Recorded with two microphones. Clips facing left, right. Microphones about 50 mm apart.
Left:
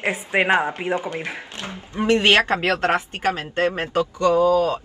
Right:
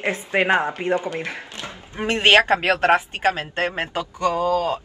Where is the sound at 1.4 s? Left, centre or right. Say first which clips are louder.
Left 1 dB; left.